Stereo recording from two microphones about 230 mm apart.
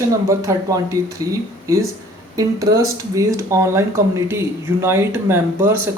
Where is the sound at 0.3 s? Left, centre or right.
Centre.